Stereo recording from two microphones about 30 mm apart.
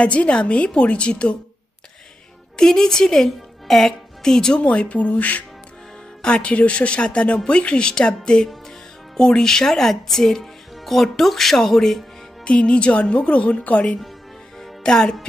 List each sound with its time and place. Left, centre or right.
0.0 s a woman's voice: left
2.5 s a woman's voice: left
4.2 s speech: left
4.6 s a woman's voice: left
6.4 s speech: left
8.6 s music: centre
9.4 s speech: centre
12.4 s speech: left
14.8 s speech: left